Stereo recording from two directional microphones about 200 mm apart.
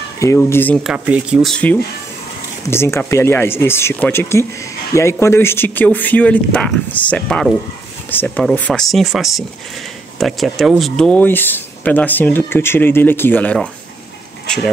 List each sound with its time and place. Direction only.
0.2 s speech: 15° left (ahead or behind)
0.8 s speech: 5° right (ahead or behind)